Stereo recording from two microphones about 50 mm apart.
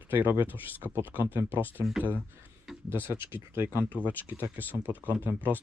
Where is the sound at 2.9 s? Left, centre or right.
Right.